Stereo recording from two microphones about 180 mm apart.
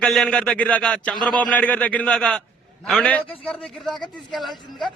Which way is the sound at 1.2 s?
25° right (ahead or behind).